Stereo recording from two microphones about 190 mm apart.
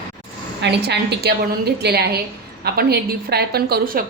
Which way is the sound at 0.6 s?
60° right (ahead or behind).